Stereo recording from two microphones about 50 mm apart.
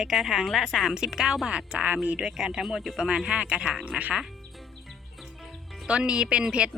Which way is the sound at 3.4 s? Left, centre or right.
Right.